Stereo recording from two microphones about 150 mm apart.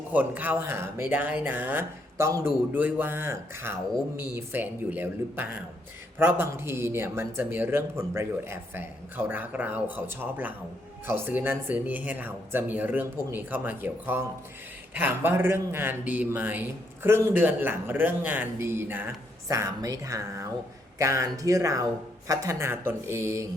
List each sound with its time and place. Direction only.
0.1 s a man's voice: 10° right (ahead or behind)